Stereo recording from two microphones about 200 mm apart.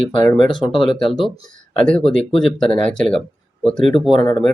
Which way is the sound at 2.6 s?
25° left (ahead or behind).